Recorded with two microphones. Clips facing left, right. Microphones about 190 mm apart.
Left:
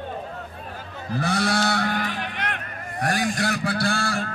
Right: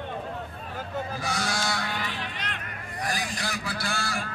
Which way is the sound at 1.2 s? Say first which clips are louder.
Left 11 dB; 60° left (ahead or behind).